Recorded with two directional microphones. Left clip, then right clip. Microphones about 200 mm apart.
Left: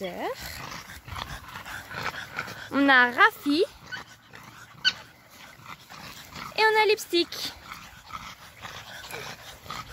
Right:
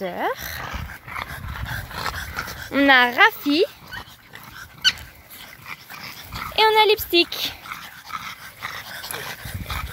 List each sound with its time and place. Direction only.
0.0 s a woman's voice: 5° right (ahead or behind)
1.1 s dog: 25° right (ahead or behind)
2.0 s dog: 55° right (ahead or behind)
2.7 s a woman's voice: centre (ahead or behind)
6.5 s speech: 5° right (ahead or behind)
7.7 s dog: 35° right (ahead or behind)